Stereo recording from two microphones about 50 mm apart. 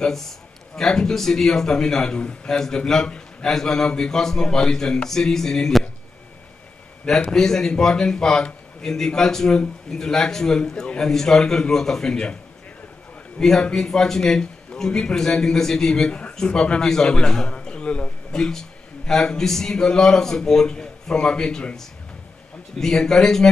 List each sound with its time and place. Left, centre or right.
0.7 s a man's voice: centre
7.2 s a man's voice: centre
13.4 s a man's voice: centre
16.1 s a man's voice: left
18.4 s a man's voice: centre
22.8 s a man's voice: centre